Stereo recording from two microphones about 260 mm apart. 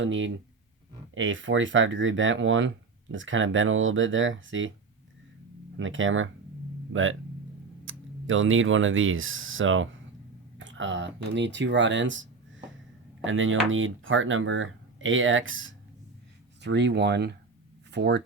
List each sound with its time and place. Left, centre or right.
0.0 s speech: right
5.7 s speech: right